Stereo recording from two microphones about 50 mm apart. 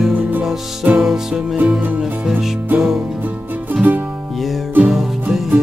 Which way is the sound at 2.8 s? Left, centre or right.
Centre.